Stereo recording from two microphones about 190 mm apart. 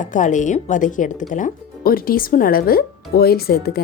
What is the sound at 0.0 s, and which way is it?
A woman's voice, 40° left (ahead or behind).